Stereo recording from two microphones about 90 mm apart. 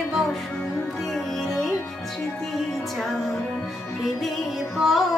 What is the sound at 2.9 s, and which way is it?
Music, 5° left (ahead or behind).